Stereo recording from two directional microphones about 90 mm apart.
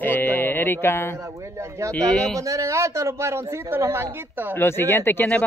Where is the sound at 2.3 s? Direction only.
40° right (ahead or behind).